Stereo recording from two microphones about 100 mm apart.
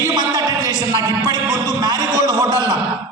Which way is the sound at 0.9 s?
40° right (ahead or behind).